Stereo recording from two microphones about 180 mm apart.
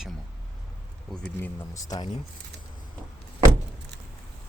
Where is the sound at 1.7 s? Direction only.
20° left (ahead or behind).